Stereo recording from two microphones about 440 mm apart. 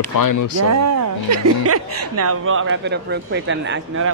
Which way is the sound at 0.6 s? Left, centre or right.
Right.